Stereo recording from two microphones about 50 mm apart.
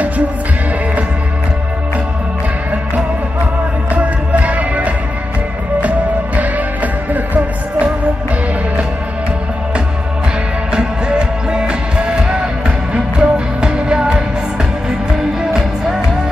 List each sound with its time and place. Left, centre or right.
3.9 s music: right
10.7 s music: centre